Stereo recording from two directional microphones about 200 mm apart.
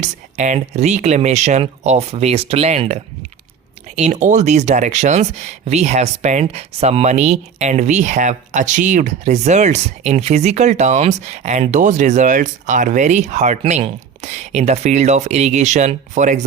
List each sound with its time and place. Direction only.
0.0 s speech: 40° right (ahead or behind)